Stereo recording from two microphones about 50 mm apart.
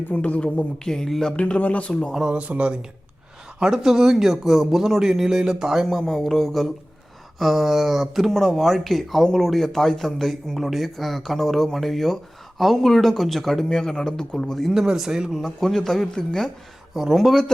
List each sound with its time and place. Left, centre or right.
0.1 s a man's voice: left
0.9 s speech: centre
1.4 s a man's voice: left
2.2 s speech: right
3.6 s a man's voice: centre
5.9 s speech: centre
8.3 s speech: centre
14.7 s a man's voice: centre
15.4 s speech: centre
16.9 s a man's voice: centre